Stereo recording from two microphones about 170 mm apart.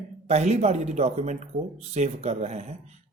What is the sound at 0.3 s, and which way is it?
A man's voice, 40° right (ahead or behind).